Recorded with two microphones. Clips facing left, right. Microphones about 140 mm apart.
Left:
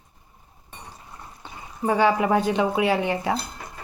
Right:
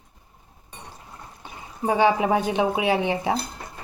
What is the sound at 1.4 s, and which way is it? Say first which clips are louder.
Speech: even; 20° right (ahead or behind).